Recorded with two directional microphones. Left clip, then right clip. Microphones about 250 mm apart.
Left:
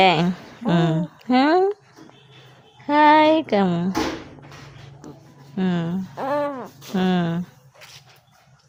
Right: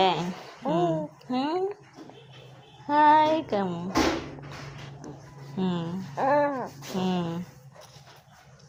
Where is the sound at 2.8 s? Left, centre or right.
Left.